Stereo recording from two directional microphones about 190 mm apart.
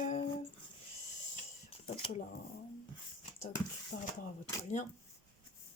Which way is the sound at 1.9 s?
30° left (ahead or behind).